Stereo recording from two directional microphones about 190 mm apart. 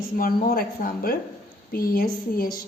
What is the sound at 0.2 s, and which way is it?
A woman's voice, 50° left (ahead or behind).